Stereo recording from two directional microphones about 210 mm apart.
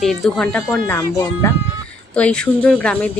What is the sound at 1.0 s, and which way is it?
Speech, 15° left (ahead or behind).